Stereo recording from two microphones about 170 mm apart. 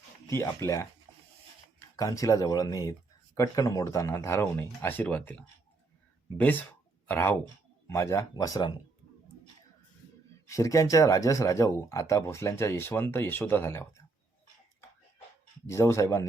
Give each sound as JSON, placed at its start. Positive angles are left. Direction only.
{"t": 0.3, "sound": "speech", "side_deg": 15}
{"t": 1.1, "sound": "a sound", "side_deg": -25}
{"t": 2.0, "sound": "speech", "side_deg": 20}
{"t": 10.5, "sound": "speech", "side_deg": 20}
{"t": 15.6, "sound": "speech", "side_deg": 15}